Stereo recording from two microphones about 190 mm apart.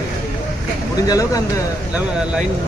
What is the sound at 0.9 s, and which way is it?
Speech, 20° left (ahead or behind).